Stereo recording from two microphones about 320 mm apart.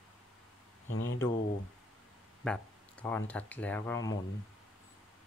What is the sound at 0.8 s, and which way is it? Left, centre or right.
Speech, left.